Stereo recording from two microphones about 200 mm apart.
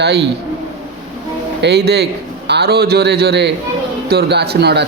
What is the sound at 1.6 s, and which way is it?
Speech, 55° right (ahead or behind).